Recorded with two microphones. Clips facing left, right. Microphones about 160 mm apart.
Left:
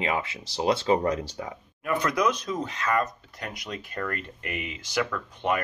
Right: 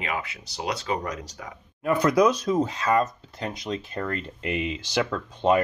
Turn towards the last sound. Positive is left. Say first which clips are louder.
# right 5 dB
turn(degrees=-25)  # may be behind; listen again after turning